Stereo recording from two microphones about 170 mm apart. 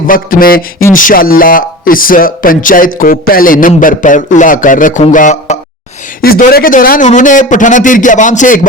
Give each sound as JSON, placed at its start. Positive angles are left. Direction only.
{"t": 0.1, "sound": "a man's voice", "side_deg": 55}
{"t": 6.2, "sound": "a man's voice", "side_deg": 60}